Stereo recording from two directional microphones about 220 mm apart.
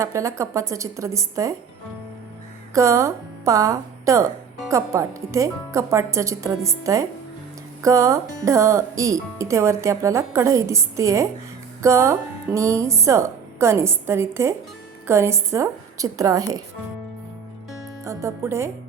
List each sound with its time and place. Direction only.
0.0 s speech: 15° right (ahead or behind)
2.7 s a woman's voice: 15° right (ahead or behind)
18.0 s speech: 15° right (ahead or behind)